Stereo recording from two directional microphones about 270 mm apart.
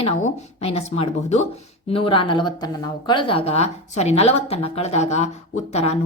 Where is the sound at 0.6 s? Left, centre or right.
Left.